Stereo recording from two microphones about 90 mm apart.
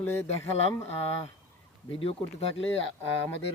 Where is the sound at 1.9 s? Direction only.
90° left.